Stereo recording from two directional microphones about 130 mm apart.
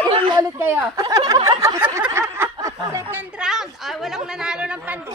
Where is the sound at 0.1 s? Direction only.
40° right (ahead or behind).